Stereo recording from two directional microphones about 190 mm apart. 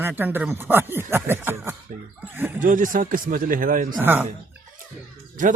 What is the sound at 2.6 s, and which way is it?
Speech, 45° right (ahead or behind).